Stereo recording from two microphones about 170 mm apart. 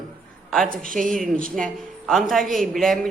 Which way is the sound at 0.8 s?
50° right (ahead or behind).